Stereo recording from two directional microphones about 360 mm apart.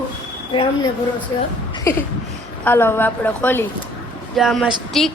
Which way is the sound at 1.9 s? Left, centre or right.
Centre.